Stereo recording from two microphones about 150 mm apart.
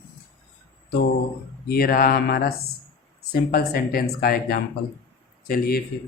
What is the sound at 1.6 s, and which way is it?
Speech, 85° left.